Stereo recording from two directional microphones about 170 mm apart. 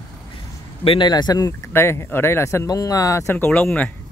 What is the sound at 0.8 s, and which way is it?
Speech, 25° left (ahead or behind).